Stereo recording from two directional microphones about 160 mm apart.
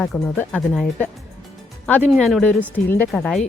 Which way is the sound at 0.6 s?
Centre (ahead or behind).